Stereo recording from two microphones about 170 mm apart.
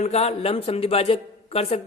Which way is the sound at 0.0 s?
40° left (ahead or behind).